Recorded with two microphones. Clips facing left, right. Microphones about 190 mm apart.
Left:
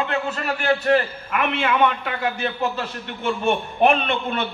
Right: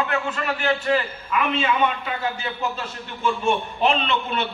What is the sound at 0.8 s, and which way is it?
A man's voice, 60° left (ahead or behind).